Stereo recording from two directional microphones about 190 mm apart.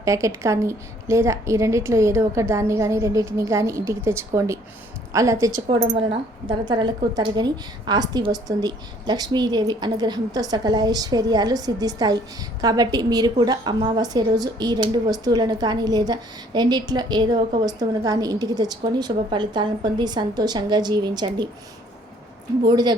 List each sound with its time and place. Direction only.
0.0 s a woman's voice: 15° right (ahead or behind)
5.9 s a woman's voice: 25° right (ahead or behind)
22.6 s a woman's voice: 20° right (ahead or behind)